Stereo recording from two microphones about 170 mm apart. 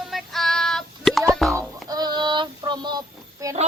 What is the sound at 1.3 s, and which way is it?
Plop, centre (ahead or behind).